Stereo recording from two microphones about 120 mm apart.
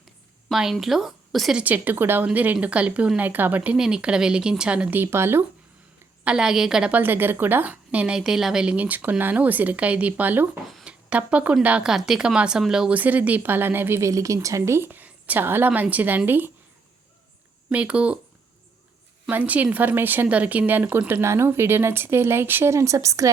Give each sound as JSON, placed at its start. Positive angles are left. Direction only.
{"t": 0.4, "sound": "speech", "side_deg": 0}
{"t": 1.6, "sound": "speech", "side_deg": -15}
{"t": 6.2, "sound": "speech", "side_deg": -5}
{"t": 10.7, "sound": "a sound", "side_deg": 0}
{"t": 11.1, "sound": "speech", "side_deg": -10}
{"t": 17.7, "sound": "speech", "side_deg": -10}
{"t": 19.3, "sound": "speech", "side_deg": -15}